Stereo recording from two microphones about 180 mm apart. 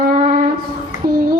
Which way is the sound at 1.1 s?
55° right (ahead or behind).